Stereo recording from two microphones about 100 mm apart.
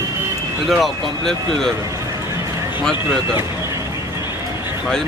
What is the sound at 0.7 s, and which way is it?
Speech, centre (ahead or behind).